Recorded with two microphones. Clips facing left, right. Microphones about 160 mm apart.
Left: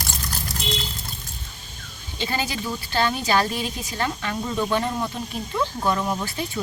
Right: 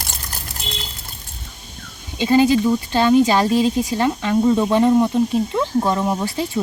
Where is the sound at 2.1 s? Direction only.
25° right (ahead or behind).